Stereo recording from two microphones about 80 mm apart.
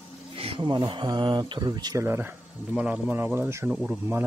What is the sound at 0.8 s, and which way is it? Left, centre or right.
Speech, right.